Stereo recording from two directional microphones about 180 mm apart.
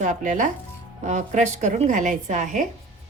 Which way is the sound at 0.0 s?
45° right (ahead or behind).